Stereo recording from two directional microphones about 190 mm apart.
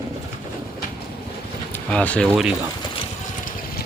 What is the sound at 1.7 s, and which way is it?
Speech, 10° left (ahead or behind).